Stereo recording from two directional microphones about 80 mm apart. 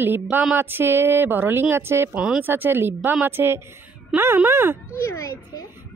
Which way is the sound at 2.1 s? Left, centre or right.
Centre.